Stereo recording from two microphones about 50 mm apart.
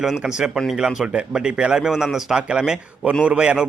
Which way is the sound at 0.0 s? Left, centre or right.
Centre.